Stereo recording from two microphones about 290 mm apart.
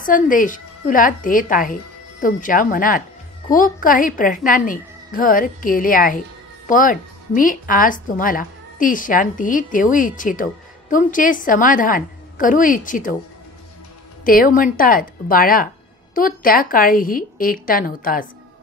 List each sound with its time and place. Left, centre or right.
0.0 s a woman's voice: left
14.2 s a woman's voice: left